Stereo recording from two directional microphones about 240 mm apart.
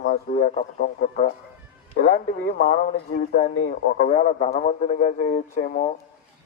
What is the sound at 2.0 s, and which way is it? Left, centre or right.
Speech, left.